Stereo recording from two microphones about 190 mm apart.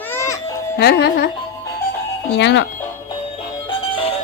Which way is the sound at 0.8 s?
55° left (ahead or behind).